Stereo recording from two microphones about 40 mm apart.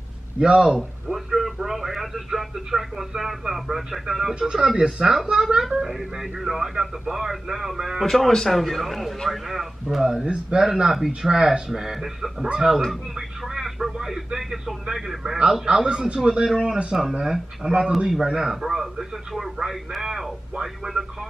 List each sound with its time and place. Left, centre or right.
0.4 s speech: right
0.7 s radio: centre
3.2 s speech: centre
4.4 s speech: right
8.0 s speech: centre
10.2 s speech: right
10.6 s speech: centre
13.5 s radio: centre
13.9 s speech: centre
15.6 s speech: right